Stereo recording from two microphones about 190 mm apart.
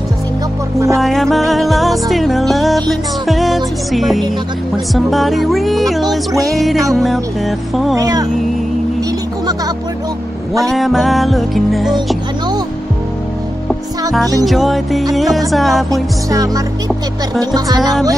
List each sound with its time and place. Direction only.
0.7 s music: 15° right (ahead or behind)
1.0 s music: centre (ahead or behind)
7.9 s speech: 20° right (ahead or behind)
10.7 s music: centre (ahead or behind)
14.4 s music: centre (ahead or behind)
15.9 s music: 20° right (ahead or behind)